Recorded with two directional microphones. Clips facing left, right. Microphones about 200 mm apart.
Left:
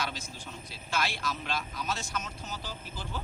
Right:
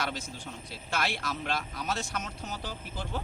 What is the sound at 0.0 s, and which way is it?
Speech, 60° right (ahead or behind).